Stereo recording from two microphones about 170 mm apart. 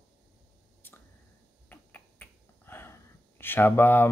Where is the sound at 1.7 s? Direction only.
10° left (ahead or behind).